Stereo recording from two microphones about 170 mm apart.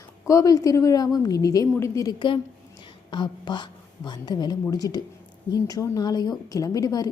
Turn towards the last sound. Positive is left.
turn(degrees=20)  # may be behind; listen again after turning